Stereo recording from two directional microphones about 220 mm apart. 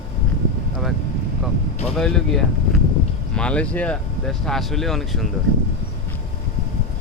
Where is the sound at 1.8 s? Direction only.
5° left (ahead or behind).